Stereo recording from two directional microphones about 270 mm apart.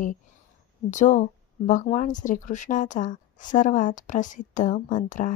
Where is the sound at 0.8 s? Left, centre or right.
Left.